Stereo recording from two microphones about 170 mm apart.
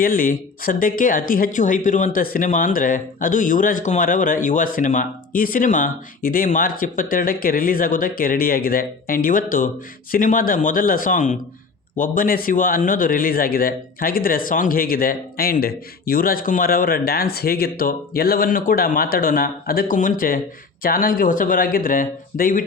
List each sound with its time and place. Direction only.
0.0 s a man's voice: 55° left (ahead or behind)